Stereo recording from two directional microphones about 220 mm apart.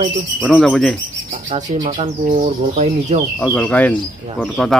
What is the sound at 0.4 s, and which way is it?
Speech, 5° left (ahead or behind).